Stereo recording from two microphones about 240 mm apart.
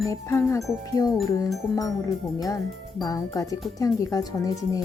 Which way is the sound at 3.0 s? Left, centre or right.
Centre.